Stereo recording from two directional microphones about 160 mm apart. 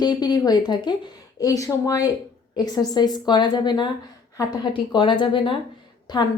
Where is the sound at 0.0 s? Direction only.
25° left (ahead or behind).